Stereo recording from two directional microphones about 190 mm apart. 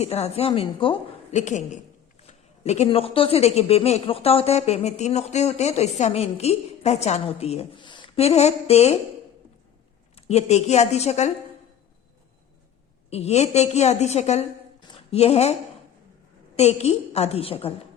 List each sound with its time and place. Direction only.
0.0 s speech: 35° left (ahead or behind)
10.2 s speech: 35° left (ahead or behind)
13.1 s speech: 35° left (ahead or behind)
14.8 s a sound: 30° left (ahead or behind)
16.6 s speech: 35° left (ahead or behind)